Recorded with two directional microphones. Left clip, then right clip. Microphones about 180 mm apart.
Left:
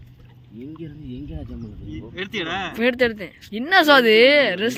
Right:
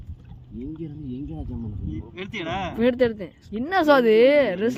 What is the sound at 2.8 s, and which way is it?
Speech, 15° right (ahead or behind).